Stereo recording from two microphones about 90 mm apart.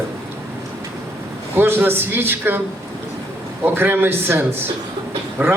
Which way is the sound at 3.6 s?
25° right (ahead or behind).